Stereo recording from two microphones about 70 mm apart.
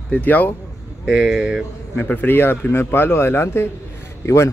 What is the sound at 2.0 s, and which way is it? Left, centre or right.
Speech, left.